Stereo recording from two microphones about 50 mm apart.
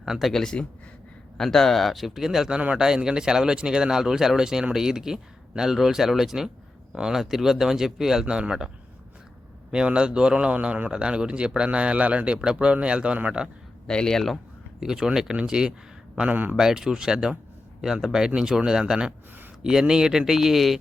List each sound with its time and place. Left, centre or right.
0.0 s a man's voice: centre
9.7 s a man's voice: centre
13.8 s speech: centre
14.8 s speech: centre
16.3 s a man's voice: right
16.6 s speech: centre